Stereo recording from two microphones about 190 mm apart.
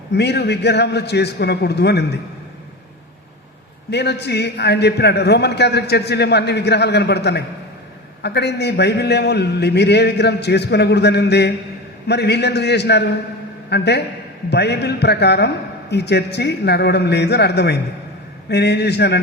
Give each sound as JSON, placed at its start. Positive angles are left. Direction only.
{"t": 0.1, "sound": "a man's voice", "side_deg": 60}
{"t": 3.8, "sound": "a man's voice", "side_deg": 60}